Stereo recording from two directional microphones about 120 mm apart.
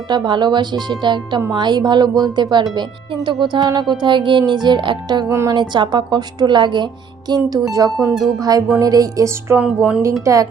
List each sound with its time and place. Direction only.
0.1 s a woman's voice: 40° right (ahead or behind)
5.3 s speech: 25° right (ahead or behind)
5.5 s a woman's voice: 40° right (ahead or behind)
9.6 s speech: 10° right (ahead or behind)
10.2 s speech: 30° right (ahead or behind)